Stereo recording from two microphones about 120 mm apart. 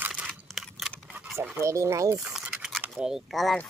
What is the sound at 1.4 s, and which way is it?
Speech, 25° right (ahead or behind).